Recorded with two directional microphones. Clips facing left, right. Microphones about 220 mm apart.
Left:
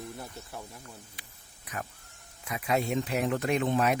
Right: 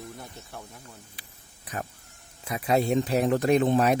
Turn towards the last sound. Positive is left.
turn(degrees=-35)  # may be behind; listen again after turning